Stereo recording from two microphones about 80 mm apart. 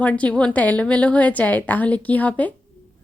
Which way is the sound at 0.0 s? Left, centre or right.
Centre.